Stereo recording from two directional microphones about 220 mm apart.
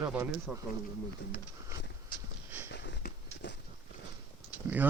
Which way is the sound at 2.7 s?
50° left (ahead or behind).